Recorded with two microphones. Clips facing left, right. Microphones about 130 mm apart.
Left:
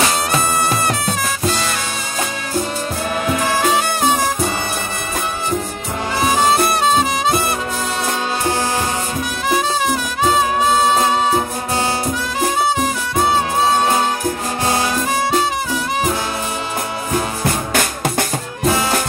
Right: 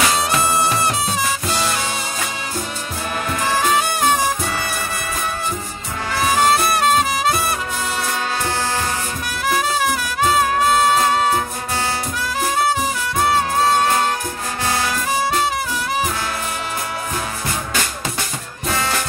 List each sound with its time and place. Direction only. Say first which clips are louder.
3.3 s music: left 2 dB; 5° left (ahead or behind)
6.3 s music: even; centre (ahead or behind)
9.5 s music: left 1 dB; centre (ahead or behind)
17.7 s drum: left 6 dB; 55° left (ahead or behind)